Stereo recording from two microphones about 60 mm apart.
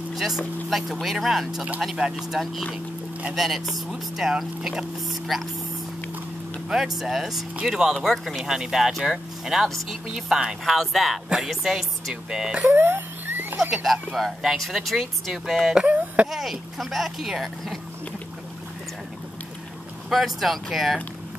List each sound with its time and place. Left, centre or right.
0.1 s vehicle: centre
0.7 s speech: centre
6.7 s speech: centre
12.6 s rodents: right
14.1 s speech: centre
15.8 s speech: right
16.3 s speech: centre
20.1 s speech: centre